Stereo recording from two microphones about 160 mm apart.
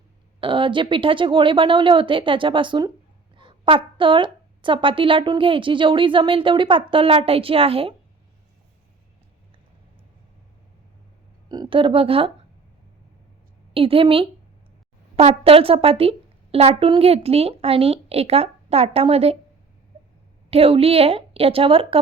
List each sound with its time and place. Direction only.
0.3 s a woman's voice: 30° right (ahead or behind)
11.4 s a woman's voice: 25° right (ahead or behind)
13.7 s a woman's voice: 35° right (ahead or behind)
20.5 s a woman's voice: 35° right (ahead or behind)